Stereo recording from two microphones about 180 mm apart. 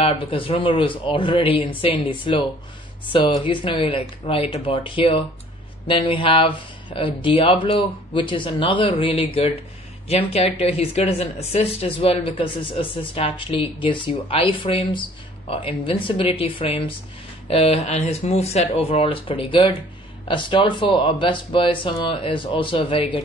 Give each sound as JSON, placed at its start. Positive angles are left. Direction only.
{"t": 0.0, "sound": "speech", "side_deg": 30}